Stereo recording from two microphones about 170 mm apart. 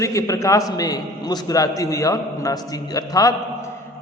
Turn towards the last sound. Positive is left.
turn(degrees=20)  # may be behind; listen again after turning